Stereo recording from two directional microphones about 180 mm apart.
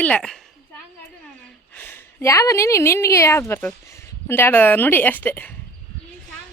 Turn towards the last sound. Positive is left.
turn(degrees=10)  # may be behind; listen again after turning